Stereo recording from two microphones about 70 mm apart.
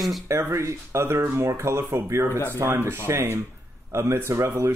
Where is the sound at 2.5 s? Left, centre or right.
Right.